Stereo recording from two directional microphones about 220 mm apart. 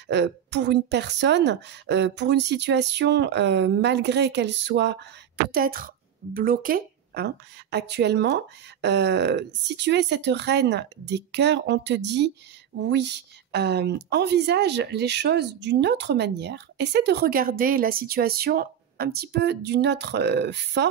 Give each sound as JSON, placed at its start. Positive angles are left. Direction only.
{"t": 0.1, "sound": "a woman's voice", "side_deg": -50}
{"t": 5.5, "sound": "a woman's voice", "side_deg": -40}